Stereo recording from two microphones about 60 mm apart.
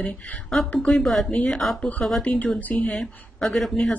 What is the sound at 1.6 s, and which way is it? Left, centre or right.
Speech, centre.